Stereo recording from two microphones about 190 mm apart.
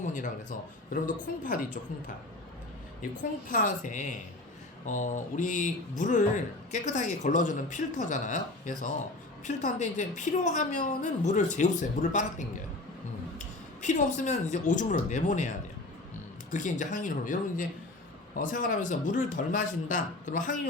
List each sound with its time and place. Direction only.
0.0 s a man's voice: 40° left (ahead or behind)
3.5 s a man's voice: 40° left (ahead or behind)
13.8 s a woman's voice: 40° left (ahead or behind)